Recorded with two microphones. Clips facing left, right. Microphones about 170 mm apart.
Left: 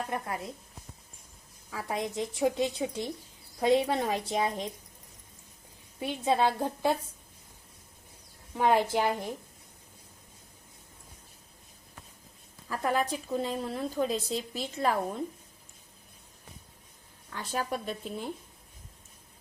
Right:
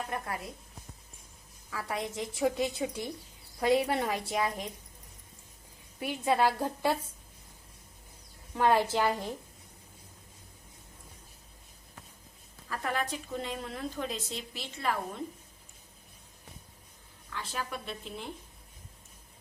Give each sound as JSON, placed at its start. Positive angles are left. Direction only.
{"t": 0.1, "sound": "speech", "side_deg": 25}
{"t": 1.7, "sound": "speech", "side_deg": 20}
{"t": 6.0, "sound": "speech", "side_deg": 25}
{"t": 8.5, "sound": "a woman's voice", "side_deg": 15}
{"t": 12.6, "sound": "a woman's voice", "side_deg": 35}
{"t": 17.3, "sound": "a woman's voice", "side_deg": 45}